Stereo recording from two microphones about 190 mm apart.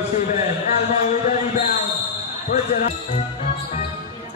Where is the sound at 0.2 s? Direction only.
40° left (ahead or behind).